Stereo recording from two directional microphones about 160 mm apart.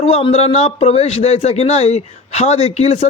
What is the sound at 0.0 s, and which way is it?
Speech, 40° left (ahead or behind).